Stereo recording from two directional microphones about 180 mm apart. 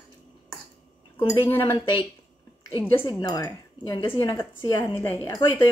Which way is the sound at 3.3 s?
20° left (ahead or behind).